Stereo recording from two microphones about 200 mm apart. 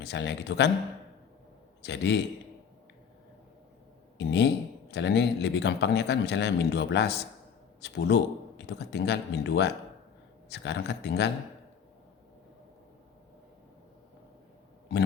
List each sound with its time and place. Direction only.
0.1 s a man's voice: 60° left (ahead or behind)
1.8 s a man's voice: 60° left (ahead or behind)
4.2 s a man's voice: 60° left (ahead or behind)